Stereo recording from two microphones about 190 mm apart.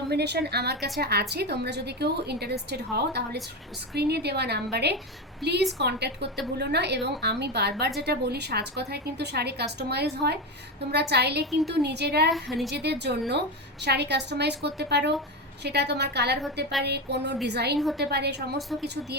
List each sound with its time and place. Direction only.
0.1 s a woman's voice: 60° right (ahead or behind)
17.7 s a woman's voice: centre (ahead or behind)
18.0 s a woman's voice: 60° right (ahead or behind)